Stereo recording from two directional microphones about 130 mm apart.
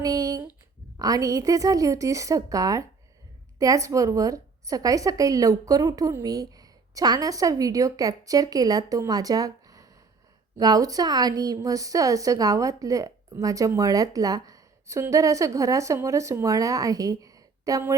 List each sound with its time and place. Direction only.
0.0 s a woman's voice: 30° right (ahead or behind)